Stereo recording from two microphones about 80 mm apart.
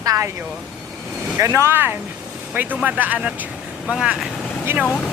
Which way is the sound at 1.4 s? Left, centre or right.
Right.